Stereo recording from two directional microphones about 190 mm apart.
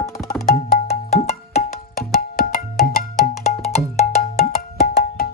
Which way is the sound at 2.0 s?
50° left (ahead or behind).